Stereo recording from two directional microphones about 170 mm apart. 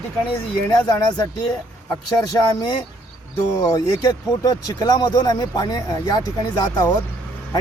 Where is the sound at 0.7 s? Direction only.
25° left (ahead or behind).